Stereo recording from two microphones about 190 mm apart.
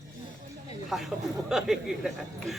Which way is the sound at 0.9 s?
Centre (ahead or behind).